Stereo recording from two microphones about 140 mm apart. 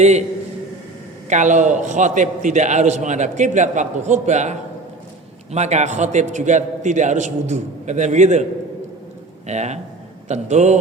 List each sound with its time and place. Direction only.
0.0 s a man's voice: 55° right (ahead or behind)
1.3 s a man's voice: 60° right (ahead or behind)
9.5 s a man's voice: 55° right (ahead or behind)